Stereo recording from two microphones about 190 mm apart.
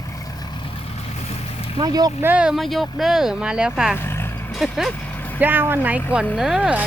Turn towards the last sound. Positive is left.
turn(degrees=-5)  # may be behind; listen again after turning